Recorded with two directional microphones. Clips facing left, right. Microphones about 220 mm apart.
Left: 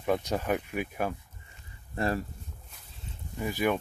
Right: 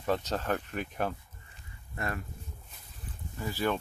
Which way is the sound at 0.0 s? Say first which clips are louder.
Left 2 dB; 10° left (ahead or behind).